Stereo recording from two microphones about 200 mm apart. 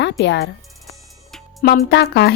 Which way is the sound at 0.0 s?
60° left (ahead or behind).